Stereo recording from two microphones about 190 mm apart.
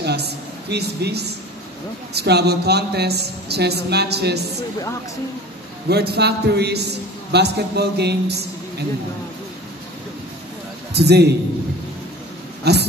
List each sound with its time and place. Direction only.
0.0 s a sound: 60° right (ahead or behind)
2.1 s a man's voice: 60° right (ahead or behind)
5.9 s a man's voice: 60° right (ahead or behind)
11.0 s a man's voice: 60° right (ahead or behind)
12.7 s a man's voice: 60° right (ahead or behind)